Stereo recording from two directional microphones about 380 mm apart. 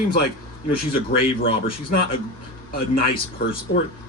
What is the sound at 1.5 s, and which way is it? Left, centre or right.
Speech, centre.